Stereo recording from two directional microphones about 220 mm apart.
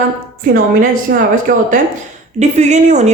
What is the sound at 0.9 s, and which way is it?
A woman's voice, 40° right (ahead or behind).